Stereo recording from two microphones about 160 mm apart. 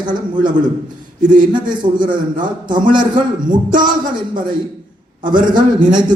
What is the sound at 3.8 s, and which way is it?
A man's voice, 30° right (ahead or behind).